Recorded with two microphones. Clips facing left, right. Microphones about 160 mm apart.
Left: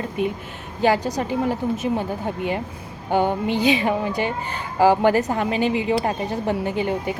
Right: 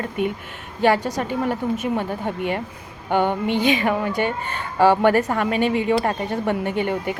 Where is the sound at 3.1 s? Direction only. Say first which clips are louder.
Even; 35° left (ahead or behind).